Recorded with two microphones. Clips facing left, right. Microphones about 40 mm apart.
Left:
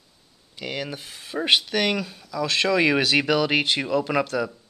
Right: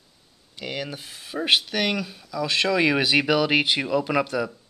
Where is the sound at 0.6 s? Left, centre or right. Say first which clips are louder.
Left 1 dB; centre.